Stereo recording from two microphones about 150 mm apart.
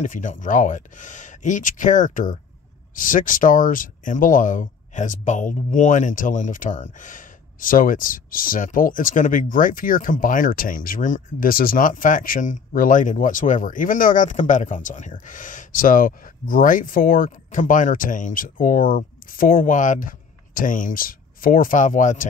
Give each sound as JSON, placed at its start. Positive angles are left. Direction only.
{"t": 0.0, "sound": "speech", "side_deg": 60}